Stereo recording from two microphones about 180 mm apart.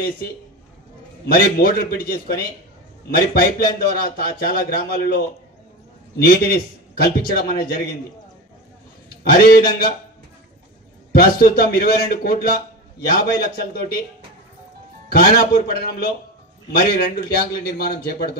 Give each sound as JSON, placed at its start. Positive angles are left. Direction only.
{"t": 0.2, "sound": "a man's voice", "side_deg": 60}
{"t": 9.2, "sound": "a man's voice", "side_deg": 55}
{"t": 11.1, "sound": "a man's voice", "side_deg": 60}
{"t": 15.0, "sound": "a man's voice", "side_deg": 60}